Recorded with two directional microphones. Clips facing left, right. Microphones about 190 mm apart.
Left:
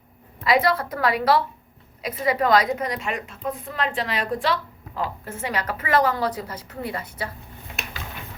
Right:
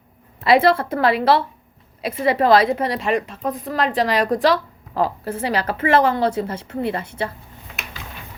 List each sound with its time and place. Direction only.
0.4 s a woman's voice: 25° right (ahead or behind)